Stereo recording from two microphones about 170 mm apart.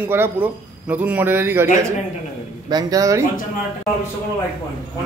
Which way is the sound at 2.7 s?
20° right (ahead or behind).